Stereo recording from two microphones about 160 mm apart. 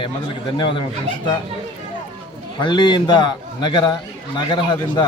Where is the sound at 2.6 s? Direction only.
30° left (ahead or behind).